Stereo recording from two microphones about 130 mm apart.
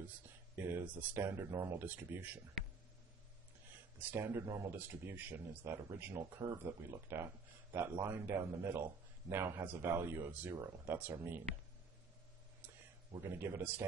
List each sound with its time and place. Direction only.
1.0 s speech: 15° right (ahead or behind)
4.0 s speech: 15° right (ahead or behind)
13.2 s speech: 20° right (ahead or behind)